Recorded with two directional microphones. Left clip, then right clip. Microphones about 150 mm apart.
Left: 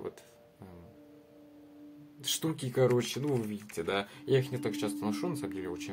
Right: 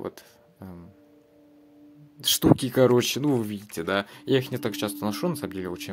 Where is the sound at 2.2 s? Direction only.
70° right (ahead or behind).